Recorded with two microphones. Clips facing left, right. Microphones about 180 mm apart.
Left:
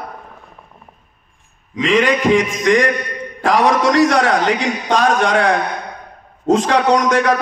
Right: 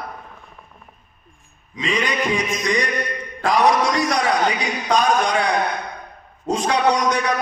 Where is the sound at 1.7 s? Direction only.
90° left.